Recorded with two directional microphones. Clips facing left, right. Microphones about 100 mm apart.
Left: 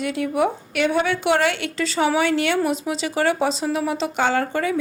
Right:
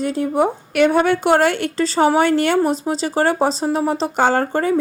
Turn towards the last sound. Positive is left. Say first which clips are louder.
# right 4 dB
turn(degrees=-40)  # may be behind; listen again after turning